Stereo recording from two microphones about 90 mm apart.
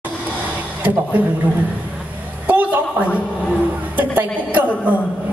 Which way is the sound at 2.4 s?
15° right (ahead or behind).